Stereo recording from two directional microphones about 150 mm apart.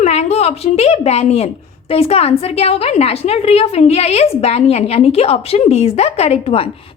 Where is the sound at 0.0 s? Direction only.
50° left (ahead or behind).